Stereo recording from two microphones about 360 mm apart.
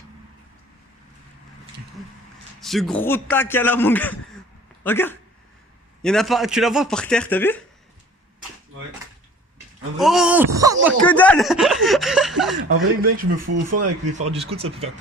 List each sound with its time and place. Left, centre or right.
2.6 s a man's voice: centre
10.0 s speech: centre
10.8 s speech: centre
12.5 s speech: right
14.0 s speech: centre